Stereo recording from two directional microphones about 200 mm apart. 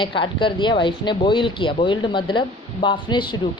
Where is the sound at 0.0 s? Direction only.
25° left (ahead or behind).